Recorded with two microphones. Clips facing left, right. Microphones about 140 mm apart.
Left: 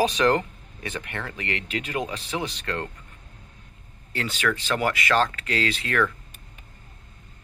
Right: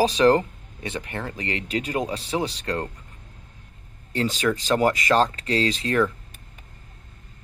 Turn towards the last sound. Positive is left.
turn(degrees=-35)  # may be behind; listen again after turning